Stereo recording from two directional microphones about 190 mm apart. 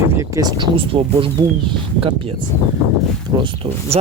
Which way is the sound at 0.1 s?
15° right (ahead or behind).